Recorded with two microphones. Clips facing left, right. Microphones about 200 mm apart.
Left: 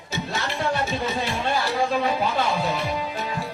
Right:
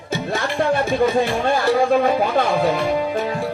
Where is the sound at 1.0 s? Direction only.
50° right (ahead or behind).